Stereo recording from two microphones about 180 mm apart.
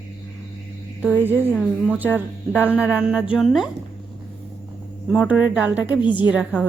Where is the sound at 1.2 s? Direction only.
10° right (ahead or behind).